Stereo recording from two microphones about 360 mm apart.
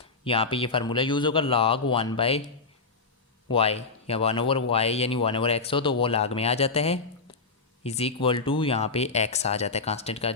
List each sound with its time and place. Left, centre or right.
0.3 s speech: centre
3.5 s speech: centre